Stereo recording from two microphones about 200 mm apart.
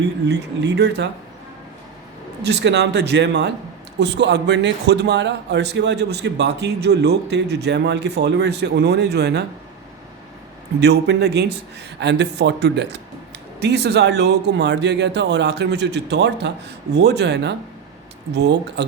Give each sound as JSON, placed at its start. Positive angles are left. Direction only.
{"t": 0.3, "sound": "a man's voice", "side_deg": -60}
{"t": 2.4, "sound": "a man's voice", "side_deg": -55}
{"t": 10.8, "sound": "a man's voice", "side_deg": -55}